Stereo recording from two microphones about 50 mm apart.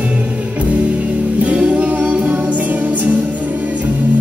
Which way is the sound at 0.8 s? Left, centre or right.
Right.